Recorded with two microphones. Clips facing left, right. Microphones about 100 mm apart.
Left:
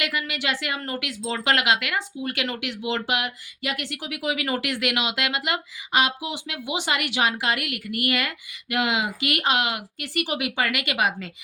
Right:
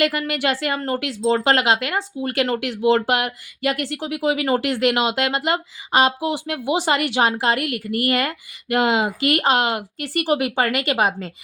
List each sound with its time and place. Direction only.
0.0 s speech: 45° right (ahead or behind)